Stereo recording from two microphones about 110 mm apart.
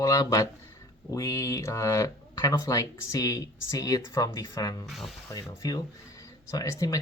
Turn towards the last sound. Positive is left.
turn(degrees=30)  # may be behind; listen again after turning